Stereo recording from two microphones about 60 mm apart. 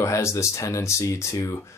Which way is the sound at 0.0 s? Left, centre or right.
Left.